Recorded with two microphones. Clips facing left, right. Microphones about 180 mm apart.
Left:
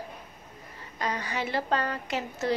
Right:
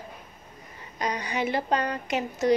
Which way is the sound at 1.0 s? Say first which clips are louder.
Right 3 dB; 20° right (ahead or behind).